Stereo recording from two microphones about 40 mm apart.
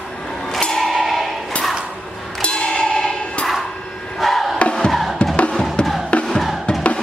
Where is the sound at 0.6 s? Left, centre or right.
Centre.